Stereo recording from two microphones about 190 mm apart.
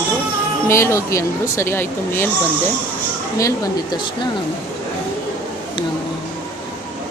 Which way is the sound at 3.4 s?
20° left (ahead or behind).